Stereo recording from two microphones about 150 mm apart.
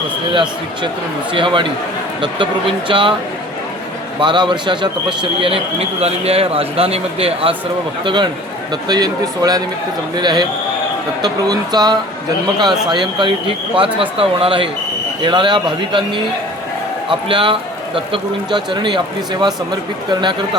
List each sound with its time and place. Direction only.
0.3 s a man's voice: 35° right (ahead or behind)
4.2 s a man's voice: 30° right (ahead or behind)